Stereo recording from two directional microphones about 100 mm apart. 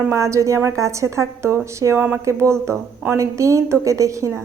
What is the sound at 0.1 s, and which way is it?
A woman's voice, 30° right (ahead or behind).